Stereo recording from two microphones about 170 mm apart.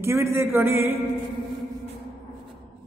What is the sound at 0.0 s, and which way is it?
Speech, 15° right (ahead or behind).